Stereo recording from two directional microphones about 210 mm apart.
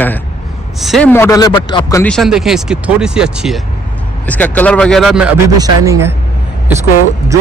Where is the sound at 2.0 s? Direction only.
Centre (ahead or behind).